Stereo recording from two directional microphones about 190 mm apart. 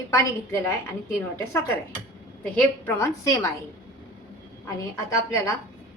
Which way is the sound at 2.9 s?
15° left (ahead or behind).